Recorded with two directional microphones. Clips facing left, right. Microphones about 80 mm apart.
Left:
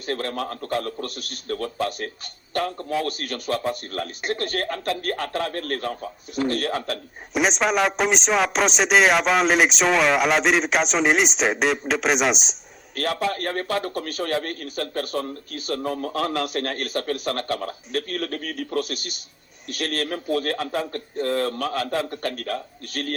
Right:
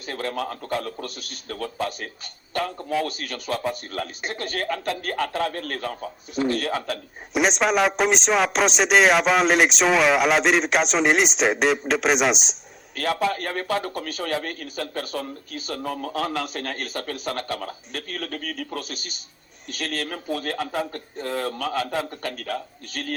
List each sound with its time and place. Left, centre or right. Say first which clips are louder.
0.1 s a man's voice: left 1 dB; left
7.3 s speech: right 1 dB; centre
12.9 s a man's voice: right 1 dB; left